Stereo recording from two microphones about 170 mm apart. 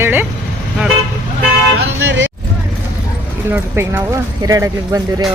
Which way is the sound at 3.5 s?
15° right (ahead or behind).